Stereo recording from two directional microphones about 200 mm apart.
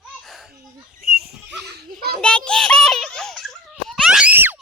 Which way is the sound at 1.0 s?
50° right (ahead or behind).